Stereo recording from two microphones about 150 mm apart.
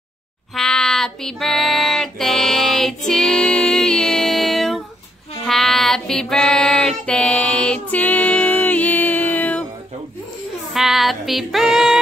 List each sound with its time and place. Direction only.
0.6 s child singing: 5° left (ahead or behind)
10.7 s female singing: centre (ahead or behind)